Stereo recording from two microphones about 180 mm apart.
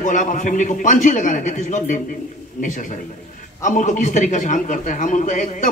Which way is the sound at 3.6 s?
45° left (ahead or behind).